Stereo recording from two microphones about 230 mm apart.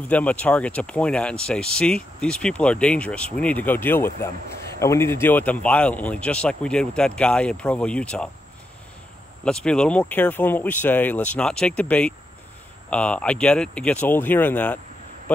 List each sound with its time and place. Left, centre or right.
0.1 s speech: centre
9.4 s speech: centre